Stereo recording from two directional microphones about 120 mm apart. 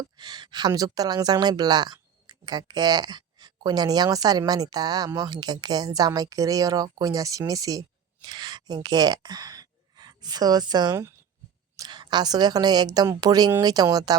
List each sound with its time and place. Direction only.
0.0 s speech: 35° right (ahead or behind)